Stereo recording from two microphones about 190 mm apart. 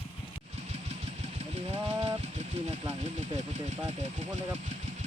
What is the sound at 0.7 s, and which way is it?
Vehicle, 35° right (ahead or behind).